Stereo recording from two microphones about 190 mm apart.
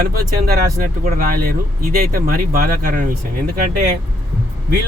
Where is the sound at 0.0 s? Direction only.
50° right (ahead or behind).